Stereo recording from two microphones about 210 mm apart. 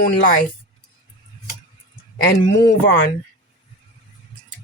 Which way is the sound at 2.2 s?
45° left (ahead or behind).